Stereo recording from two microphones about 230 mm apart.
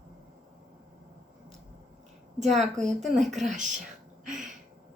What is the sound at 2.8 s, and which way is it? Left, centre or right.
Speech, centre.